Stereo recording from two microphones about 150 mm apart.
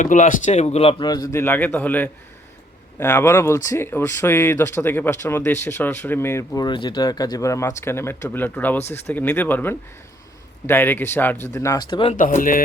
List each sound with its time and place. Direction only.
0.0 s speech: 55° left (ahead or behind); by 11.9 s 20° left (ahead or behind)
11.9 s speech: 35° left (ahead or behind)
12.1 s speech: 60° left (ahead or behind)